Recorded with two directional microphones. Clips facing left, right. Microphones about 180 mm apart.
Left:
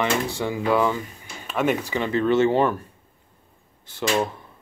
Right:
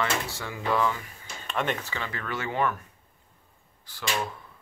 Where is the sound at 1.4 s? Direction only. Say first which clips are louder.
Left 7 dB; 5° left (ahead or behind); by 2.8 s 30° left (ahead or behind).